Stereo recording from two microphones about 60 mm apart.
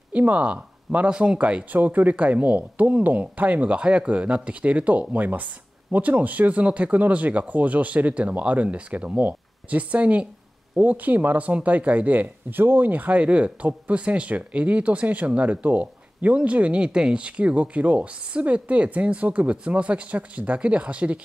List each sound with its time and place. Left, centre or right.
0.1 s speech: right